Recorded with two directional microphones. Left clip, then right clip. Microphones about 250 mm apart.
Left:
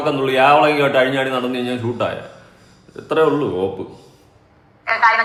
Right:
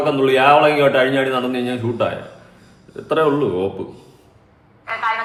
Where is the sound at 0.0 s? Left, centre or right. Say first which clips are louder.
Right 1 dB; centre.